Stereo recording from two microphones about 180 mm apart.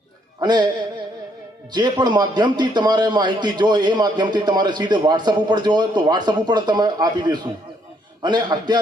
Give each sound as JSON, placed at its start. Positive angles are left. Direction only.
{"t": 0.3, "sound": "speech", "side_deg": -25}
{"t": 1.7, "sound": "a man's voice", "side_deg": -25}